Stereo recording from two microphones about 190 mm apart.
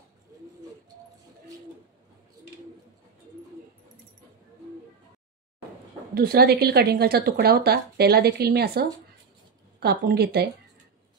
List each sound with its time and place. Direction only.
6.1 s a woman's voice: 55° right (ahead or behind)